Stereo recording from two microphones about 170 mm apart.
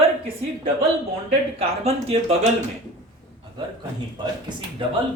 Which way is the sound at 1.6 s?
35° right (ahead or behind).